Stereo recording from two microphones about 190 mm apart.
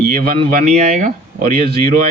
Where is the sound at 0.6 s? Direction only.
45° right (ahead or behind).